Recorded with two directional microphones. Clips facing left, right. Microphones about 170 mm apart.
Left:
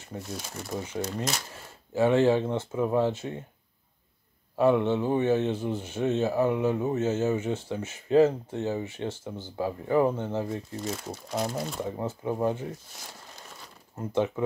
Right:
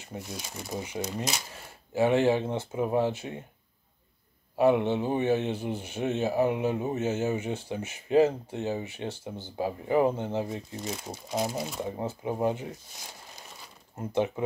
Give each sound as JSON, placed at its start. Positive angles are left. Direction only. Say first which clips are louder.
{"t": 0.1, "sound": "speech", "louder": "left 1 dB", "side_deg": -20}
{"t": 0.5, "sound": "speech", "louder": "left 1 dB", "side_deg": 0}
{"t": 0.7, "sound": "speech", "louder": "left 1 dB", "side_deg": -15}
{"t": 1.0, "sound": "speech", "louder": "left 1 dB", "side_deg": -5}
{"t": 2.0, "sound": "speech", "louder": "left 2 dB", "side_deg": -15}
{"t": 4.6, "sound": "speech", "louder": "left 1 dB", "side_deg": -15}
{"t": 10.8, "sound": "speech", "louder": "left 2 dB", "side_deg": 0}
{"t": 12.0, "sound": "speech", "louder": "even", "side_deg": -15}
{"t": 13.9, "sound": "speech", "louder": "left 1 dB", "side_deg": -20}